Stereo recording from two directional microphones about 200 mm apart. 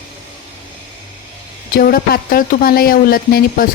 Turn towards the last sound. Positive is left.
turn(degrees=45)  # may be behind; listen again after turning